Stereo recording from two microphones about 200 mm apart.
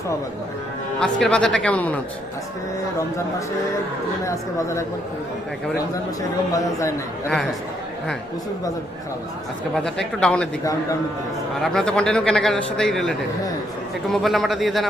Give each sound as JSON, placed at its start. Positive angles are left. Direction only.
{"t": 0.9, "sound": "a man's voice", "side_deg": 5}
{"t": 4.3, "sound": "speech", "side_deg": 15}
{"t": 9.7, "sound": "a man's voice", "side_deg": 0}
{"t": 11.6, "sound": "a man's voice", "side_deg": 0}